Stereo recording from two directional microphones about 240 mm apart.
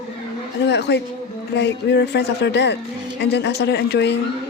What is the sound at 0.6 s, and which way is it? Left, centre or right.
Speech, left.